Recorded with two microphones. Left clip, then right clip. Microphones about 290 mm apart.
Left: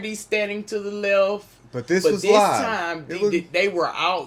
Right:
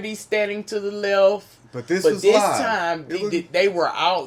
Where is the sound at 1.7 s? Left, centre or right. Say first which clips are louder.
Even; left.